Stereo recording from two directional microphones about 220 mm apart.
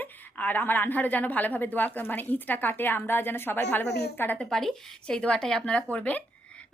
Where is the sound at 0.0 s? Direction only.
10° left (ahead or behind).